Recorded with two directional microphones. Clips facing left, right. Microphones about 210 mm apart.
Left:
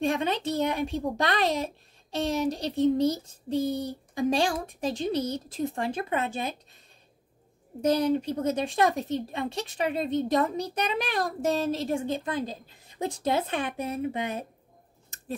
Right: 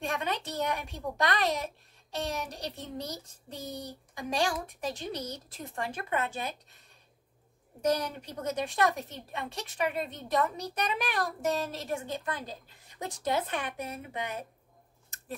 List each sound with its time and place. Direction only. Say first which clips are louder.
0.0 s a child's voice: left 7 dB; 25° left (ahead or behind)
7.8 s a child's voice: left 6 dB; 30° left (ahead or behind)